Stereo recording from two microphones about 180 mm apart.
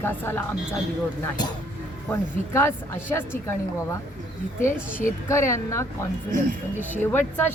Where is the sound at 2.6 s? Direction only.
15° left (ahead or behind).